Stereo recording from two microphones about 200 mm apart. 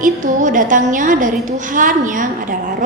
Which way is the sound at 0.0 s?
40° right (ahead or behind).